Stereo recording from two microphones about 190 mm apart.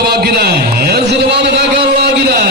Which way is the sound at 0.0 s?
55° right (ahead or behind).